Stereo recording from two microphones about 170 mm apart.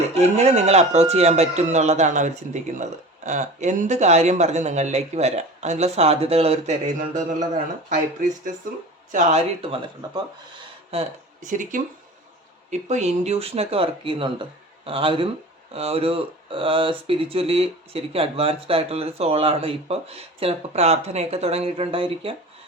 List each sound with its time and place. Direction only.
0.1 s speech: 40° right (ahead or behind)
10.0 s speech: 25° right (ahead or behind)
10.9 s speech: 45° right (ahead or behind)
12.9 s speech: 40° right (ahead or behind)